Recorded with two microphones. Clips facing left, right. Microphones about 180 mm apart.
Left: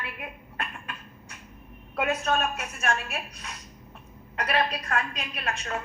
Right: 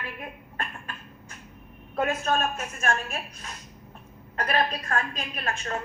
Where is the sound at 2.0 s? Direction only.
30° right (ahead or behind).